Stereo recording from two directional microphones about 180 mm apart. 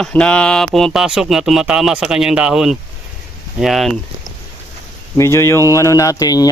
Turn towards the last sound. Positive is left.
turn(degrees=20)  # may be behind; listen again after turning